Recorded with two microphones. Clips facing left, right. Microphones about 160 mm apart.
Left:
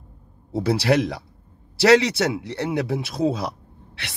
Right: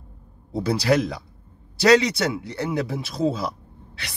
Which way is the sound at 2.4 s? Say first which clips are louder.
Left 1 dB; 65° left (ahead or behind).